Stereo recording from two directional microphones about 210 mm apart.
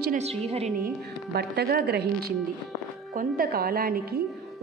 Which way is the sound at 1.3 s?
50° right (ahead or behind).